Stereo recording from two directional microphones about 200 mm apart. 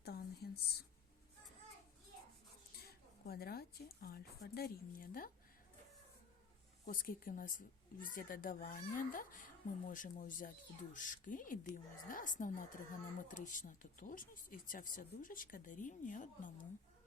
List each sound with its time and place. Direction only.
0.0 s a sound: 50° left (ahead or behind)
2.8 s a woman's voice: 50° left (ahead or behind)
6.8 s speech: 45° left (ahead or behind)